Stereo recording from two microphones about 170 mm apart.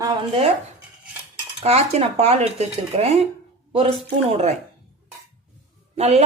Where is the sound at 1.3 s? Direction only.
40° right (ahead or behind).